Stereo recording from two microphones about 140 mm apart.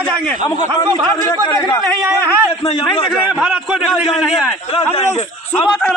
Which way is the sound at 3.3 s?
5° right (ahead or behind).